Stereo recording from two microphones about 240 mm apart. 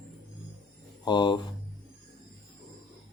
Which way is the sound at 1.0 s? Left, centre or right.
Centre.